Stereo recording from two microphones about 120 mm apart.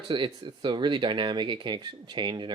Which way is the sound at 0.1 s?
45° right (ahead or behind).